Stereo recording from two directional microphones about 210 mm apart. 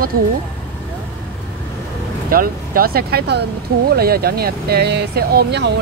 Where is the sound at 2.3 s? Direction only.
45° right (ahead or behind).